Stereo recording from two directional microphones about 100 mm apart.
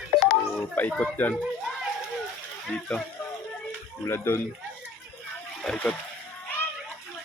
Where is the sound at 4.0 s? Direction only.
25° left (ahead or behind).